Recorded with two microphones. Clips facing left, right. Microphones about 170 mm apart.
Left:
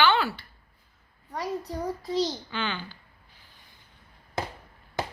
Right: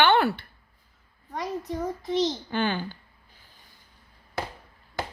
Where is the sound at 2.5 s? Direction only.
45° right (ahead or behind).